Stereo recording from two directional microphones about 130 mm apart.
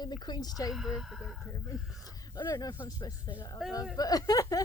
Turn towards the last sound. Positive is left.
turn(degrees=25)  # may be behind; listen again after turning